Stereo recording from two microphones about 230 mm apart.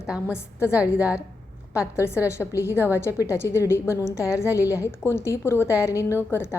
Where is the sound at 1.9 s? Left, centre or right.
Centre.